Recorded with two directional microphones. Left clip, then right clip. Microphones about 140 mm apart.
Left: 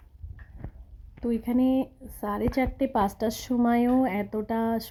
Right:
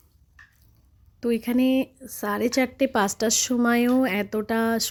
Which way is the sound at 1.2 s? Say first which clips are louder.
Right 3 dB; 25° right (ahead or behind).